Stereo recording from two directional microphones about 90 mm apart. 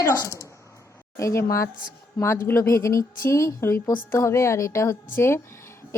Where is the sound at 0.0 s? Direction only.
35° left (ahead or behind).